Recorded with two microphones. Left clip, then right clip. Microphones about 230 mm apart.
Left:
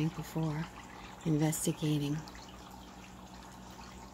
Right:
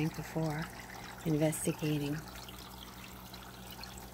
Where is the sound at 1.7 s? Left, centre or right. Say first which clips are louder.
Left 1 dB; centre.